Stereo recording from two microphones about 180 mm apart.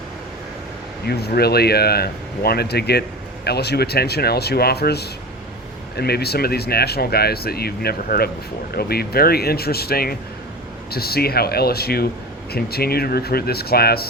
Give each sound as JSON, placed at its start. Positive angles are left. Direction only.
{"t": 1.0, "sound": "speech", "side_deg": 60}